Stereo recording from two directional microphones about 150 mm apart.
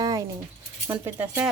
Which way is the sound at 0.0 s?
25° right (ahead or behind).